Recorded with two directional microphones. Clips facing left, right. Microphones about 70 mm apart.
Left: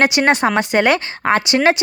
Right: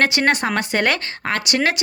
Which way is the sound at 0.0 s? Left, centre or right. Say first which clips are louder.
Left 4 dB; centre.